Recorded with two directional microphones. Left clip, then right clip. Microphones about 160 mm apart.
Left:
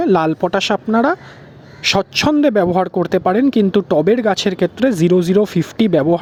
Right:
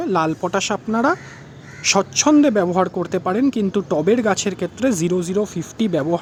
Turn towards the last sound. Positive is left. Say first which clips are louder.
# left 6 dB
turn(degrees=35)  # may be behind; listen again after turning